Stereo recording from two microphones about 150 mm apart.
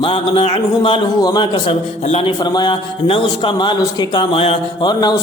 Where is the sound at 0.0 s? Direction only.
35° left (ahead or behind).